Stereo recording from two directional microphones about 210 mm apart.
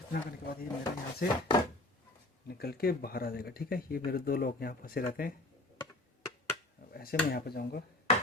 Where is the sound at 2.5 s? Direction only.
50° left (ahead or behind).